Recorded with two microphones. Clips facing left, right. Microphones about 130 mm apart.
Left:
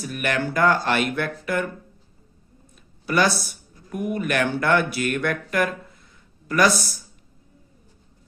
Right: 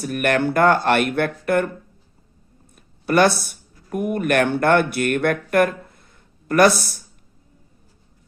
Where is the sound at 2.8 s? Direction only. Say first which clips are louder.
Right 5 dB; 55° right (ahead or behind).